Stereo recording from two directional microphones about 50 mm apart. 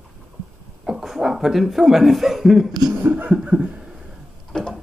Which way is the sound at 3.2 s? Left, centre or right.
Right.